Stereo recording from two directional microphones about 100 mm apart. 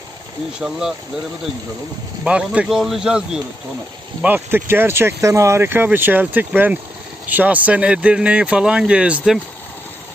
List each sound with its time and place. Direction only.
0.6 s speech: 5° right (ahead or behind)
2.2 s speech: 10° right (ahead or behind)
4.4 s speech: 20° right (ahead or behind)